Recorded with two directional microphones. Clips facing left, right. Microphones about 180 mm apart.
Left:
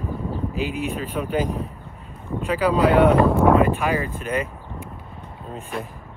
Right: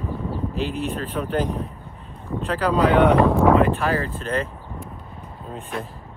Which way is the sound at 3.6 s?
15° left (ahead or behind).